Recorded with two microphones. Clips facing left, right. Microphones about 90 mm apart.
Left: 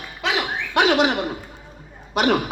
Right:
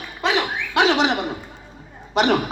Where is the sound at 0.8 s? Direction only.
5° left (ahead or behind).